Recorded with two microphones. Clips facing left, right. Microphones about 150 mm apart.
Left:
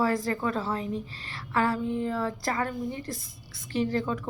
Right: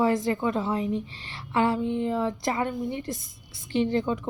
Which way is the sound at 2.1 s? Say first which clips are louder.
Right 3 dB; 20° right (ahead or behind).